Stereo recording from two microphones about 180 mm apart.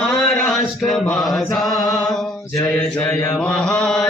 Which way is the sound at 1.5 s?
Centre (ahead or behind).